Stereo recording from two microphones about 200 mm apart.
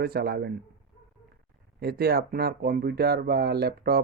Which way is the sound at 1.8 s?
50° right (ahead or behind).